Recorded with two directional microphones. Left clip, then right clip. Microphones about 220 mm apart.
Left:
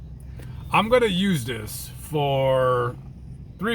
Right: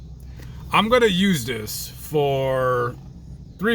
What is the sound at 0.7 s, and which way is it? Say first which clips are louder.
Speech: right 2 dB; 20° right (ahead or behind).